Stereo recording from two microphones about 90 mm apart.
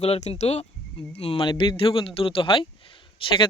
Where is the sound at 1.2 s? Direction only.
90° left; by 2.6 s 75° left (ahead or behind).